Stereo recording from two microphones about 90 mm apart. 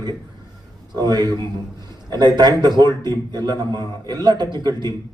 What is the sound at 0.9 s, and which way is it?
Speech, 50° right (ahead or behind).